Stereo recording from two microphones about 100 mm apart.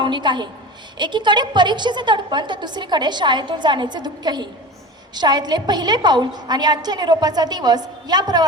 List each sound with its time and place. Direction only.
0.0 s a woman's voice: 50° right (ahead or behind)